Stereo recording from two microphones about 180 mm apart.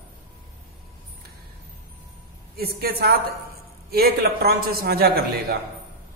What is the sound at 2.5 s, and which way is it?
A man's voice, 60° right (ahead or behind).